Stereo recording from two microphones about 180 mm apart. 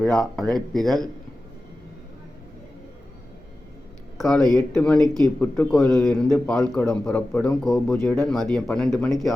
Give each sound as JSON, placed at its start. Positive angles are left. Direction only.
{"t": 0.0, "sound": "speech", "side_deg": 5}
{"t": 4.2, "sound": "speech", "side_deg": 0}